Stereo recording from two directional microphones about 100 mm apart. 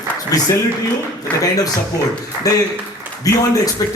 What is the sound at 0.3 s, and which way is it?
A man's voice, 35° left (ahead or behind).